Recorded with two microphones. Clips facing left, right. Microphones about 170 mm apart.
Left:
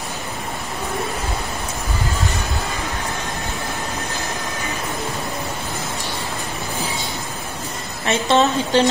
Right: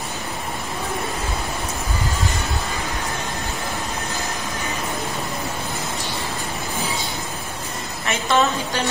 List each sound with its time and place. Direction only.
8.1 s a woman's voice: 30° left (ahead or behind)